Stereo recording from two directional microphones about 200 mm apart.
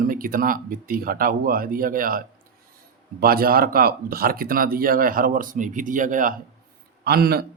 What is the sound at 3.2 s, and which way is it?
Speech, 50° right (ahead or behind).